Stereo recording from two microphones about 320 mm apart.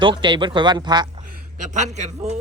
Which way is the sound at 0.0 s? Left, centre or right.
Centre.